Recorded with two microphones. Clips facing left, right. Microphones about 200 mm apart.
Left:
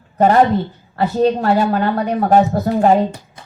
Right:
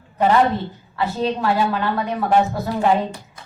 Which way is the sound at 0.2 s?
45° left (ahead or behind).